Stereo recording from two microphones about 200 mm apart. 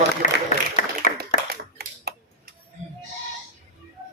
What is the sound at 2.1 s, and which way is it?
Tick-tock, 55° right (ahead or behind).